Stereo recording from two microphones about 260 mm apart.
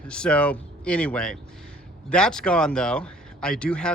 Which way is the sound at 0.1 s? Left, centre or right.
Centre.